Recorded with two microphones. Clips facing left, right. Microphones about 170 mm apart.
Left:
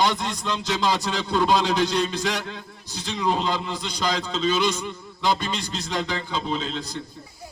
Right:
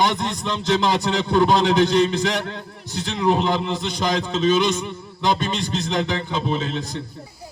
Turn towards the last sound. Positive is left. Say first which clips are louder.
# right 4 dB
turn(degrees=-20)  # may be behind; listen again after turning